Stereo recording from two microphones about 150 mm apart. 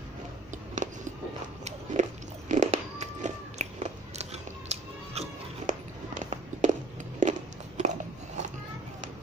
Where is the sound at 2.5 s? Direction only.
55° right (ahead or behind).